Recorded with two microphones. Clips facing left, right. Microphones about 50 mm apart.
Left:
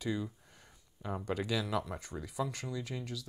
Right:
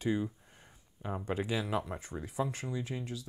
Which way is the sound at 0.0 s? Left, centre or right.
Right.